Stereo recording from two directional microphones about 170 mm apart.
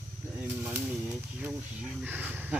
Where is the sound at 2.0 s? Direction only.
10° right (ahead or behind).